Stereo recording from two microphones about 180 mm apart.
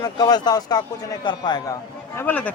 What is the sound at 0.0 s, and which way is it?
A man's voice, 20° left (ahead or behind).